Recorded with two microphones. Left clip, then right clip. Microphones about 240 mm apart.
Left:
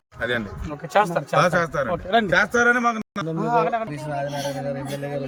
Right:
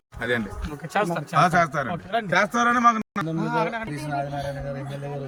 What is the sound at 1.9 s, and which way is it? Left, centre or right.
Speech, left.